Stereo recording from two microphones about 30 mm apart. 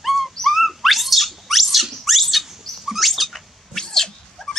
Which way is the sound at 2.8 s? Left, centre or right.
Centre.